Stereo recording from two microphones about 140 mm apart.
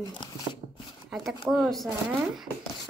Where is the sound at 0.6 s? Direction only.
55° right (ahead or behind).